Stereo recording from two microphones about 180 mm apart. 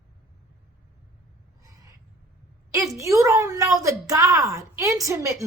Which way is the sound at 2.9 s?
15° right (ahead or behind).